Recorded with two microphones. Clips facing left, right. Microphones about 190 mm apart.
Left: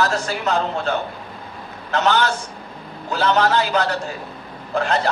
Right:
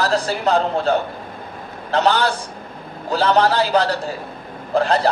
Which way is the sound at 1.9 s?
35° right (ahead or behind).